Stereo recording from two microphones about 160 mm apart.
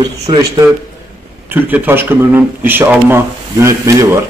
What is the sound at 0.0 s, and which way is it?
Speech, 25° right (ahead or behind).